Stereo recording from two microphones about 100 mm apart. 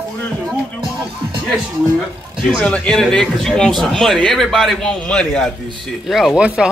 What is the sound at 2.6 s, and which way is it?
A man's voice, 5° left (ahead or behind).